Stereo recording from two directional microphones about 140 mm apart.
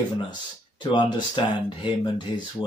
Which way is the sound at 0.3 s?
35° left (ahead or behind).